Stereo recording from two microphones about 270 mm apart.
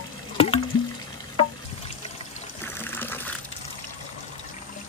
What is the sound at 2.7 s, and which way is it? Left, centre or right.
Water, centre.